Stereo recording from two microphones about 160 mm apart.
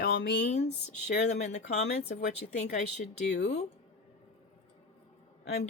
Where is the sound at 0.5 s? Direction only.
45° left (ahead or behind).